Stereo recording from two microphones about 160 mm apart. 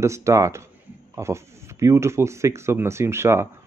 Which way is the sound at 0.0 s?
20° right (ahead or behind).